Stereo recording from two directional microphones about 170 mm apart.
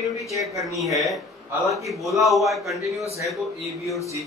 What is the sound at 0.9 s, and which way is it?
Speech, centre (ahead or behind).